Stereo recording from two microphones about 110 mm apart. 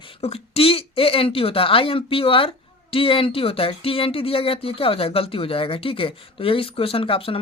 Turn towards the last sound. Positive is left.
turn(degrees=55)  # may be behind; listen again after turning